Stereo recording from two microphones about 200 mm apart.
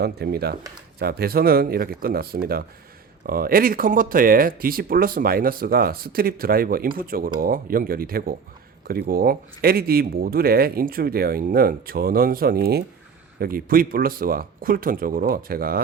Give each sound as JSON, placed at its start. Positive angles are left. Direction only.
{"t": 0.0, "sound": "speech", "side_deg": -50}